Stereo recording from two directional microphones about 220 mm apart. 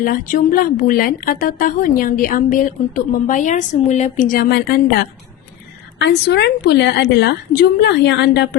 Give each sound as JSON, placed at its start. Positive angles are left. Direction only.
{"t": 0.0, "sound": "a woman's voice", "side_deg": 40}